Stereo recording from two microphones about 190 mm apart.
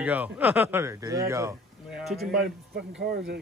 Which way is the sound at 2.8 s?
70° right (ahead or behind).